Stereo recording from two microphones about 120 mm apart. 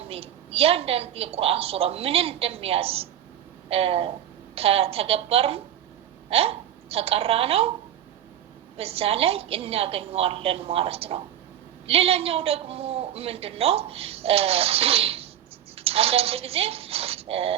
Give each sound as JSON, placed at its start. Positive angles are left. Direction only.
{"t": 0.1, "sound": "a man's voice", "side_deg": -55}
{"t": 8.8, "sound": "a man's voice", "side_deg": -55}